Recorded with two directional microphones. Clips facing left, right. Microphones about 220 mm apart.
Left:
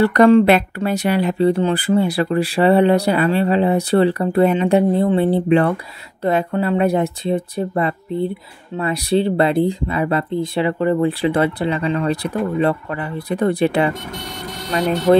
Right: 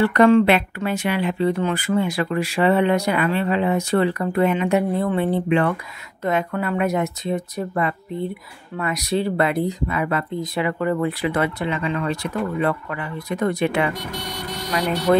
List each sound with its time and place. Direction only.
0.0 s speech: 40° left (ahead or behind)